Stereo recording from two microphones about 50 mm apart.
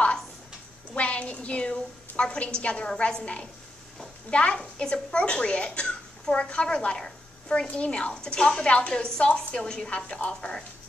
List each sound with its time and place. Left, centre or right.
0.9 s a woman's voice: left